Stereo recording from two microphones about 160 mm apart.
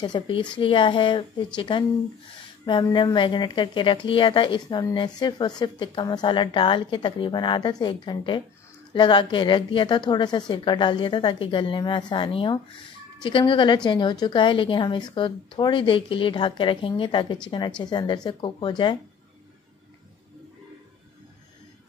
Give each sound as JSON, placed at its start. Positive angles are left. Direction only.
{"t": 0.0, "sound": "a woman's voice", "side_deg": 30}